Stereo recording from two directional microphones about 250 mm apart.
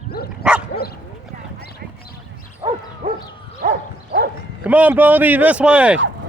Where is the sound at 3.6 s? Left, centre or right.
Right.